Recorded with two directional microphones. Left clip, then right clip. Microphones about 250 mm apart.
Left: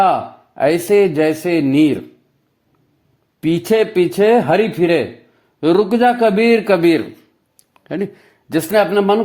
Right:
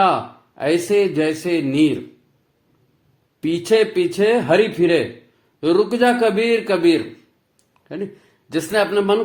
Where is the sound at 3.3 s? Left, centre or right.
Left.